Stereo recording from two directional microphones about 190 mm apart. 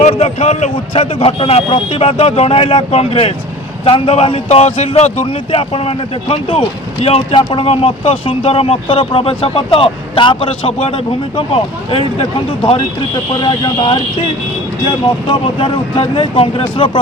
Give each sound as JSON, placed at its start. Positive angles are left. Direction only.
{"t": 0.0, "sound": "a man's voice", "side_deg": 35}
{"t": 13.4, "sound": "a man's voice", "side_deg": 25}
{"t": 15.3, "sound": "a man's voice", "side_deg": 30}